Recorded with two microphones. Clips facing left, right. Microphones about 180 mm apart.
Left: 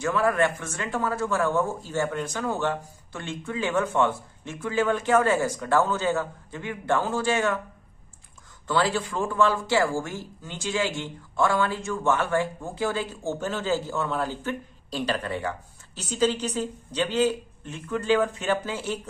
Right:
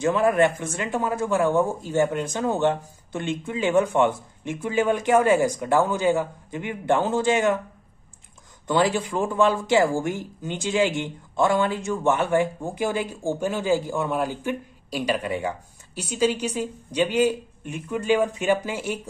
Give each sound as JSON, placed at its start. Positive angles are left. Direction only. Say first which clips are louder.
{"t": 0.0, "sound": "speech", "louder": "right 4 dB", "side_deg": -20}
{"t": 8.6, "sound": "speech", "louder": "right 3 dB", "side_deg": -15}